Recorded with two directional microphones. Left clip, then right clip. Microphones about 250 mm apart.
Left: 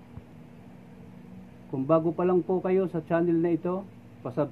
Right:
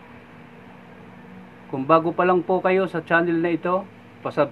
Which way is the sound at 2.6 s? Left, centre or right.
Centre.